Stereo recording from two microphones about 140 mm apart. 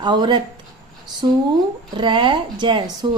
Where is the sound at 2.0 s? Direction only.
35° right (ahead or behind).